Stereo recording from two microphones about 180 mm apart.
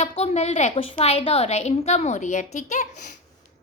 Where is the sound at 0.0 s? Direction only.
35° left (ahead or behind).